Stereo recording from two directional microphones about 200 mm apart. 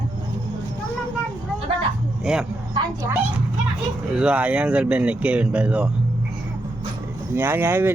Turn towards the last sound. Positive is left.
turn(degrees=-10)  # may be behind; listen again after turning